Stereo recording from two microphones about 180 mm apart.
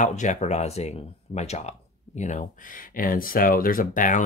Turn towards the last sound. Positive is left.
turn(degrees=45)  # may be behind; listen again after turning